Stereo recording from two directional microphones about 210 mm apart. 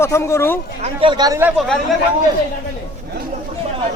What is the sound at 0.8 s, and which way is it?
Speech, 25° right (ahead or behind).